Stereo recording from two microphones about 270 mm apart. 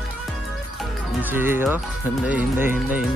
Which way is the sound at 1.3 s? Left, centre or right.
Centre.